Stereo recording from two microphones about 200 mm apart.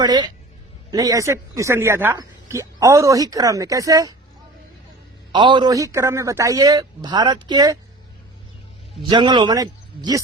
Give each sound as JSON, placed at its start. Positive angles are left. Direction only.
{"t": 0.0, "sound": "a man's voice", "side_deg": -20}
{"t": 5.3, "sound": "a man's voice", "side_deg": -25}
{"t": 9.0, "sound": "a man's voice", "side_deg": -20}